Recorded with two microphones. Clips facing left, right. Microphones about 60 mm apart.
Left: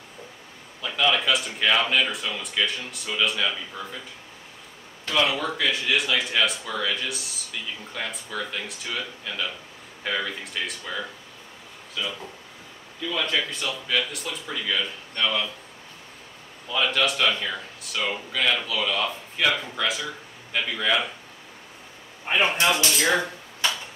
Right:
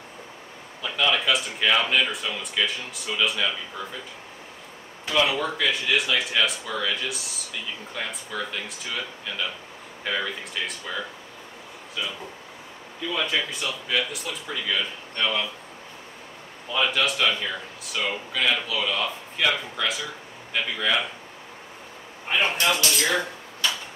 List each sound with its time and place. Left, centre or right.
0.8 s speech: centre
5.0 s speech: centre
16.7 s speech: centre
22.3 s speech: left
22.8 s speech: centre